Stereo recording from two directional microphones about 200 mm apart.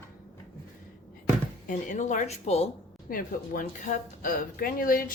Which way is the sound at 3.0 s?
40° left (ahead or behind).